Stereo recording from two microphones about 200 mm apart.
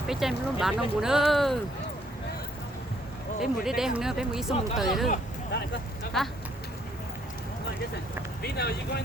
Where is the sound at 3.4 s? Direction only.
Centre (ahead or behind).